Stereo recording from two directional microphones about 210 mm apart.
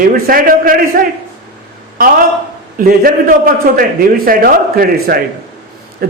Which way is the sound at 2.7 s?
40° right (ahead or behind).